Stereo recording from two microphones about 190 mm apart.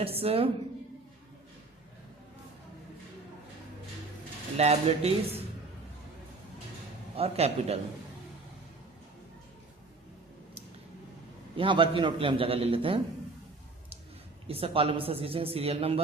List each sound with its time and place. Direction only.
0.0 s speech: 30° right (ahead or behind)
4.5 s speech: 35° right (ahead or behind)
7.2 s speech: 35° right (ahead or behind)
11.5 s speech: 25° right (ahead or behind)
14.4 s speech: 30° right (ahead or behind)